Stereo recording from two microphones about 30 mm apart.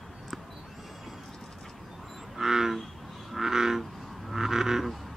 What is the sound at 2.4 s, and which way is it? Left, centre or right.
Frog, centre.